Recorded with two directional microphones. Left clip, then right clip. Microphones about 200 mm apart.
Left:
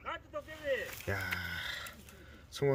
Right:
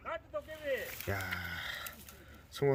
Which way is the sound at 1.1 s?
5° left (ahead or behind).